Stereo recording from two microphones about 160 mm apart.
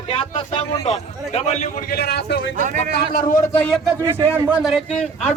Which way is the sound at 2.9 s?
70° left (ahead or behind).